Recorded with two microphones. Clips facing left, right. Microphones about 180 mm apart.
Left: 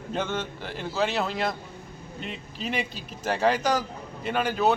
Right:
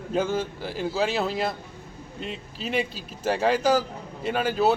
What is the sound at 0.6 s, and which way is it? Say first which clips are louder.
Speech: even; 5° right (ahead or behind).